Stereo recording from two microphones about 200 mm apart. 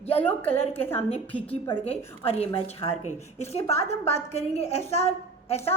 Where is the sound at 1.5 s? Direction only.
30° left (ahead or behind).